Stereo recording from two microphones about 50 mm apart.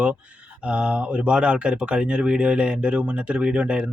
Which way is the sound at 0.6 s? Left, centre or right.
Right.